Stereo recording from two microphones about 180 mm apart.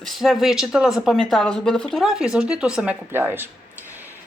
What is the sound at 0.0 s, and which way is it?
Speech, centre (ahead or behind).